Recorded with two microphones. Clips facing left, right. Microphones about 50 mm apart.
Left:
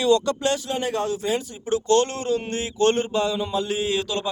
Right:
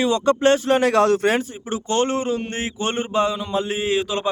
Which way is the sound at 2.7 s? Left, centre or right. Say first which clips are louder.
Left 2 dB; centre.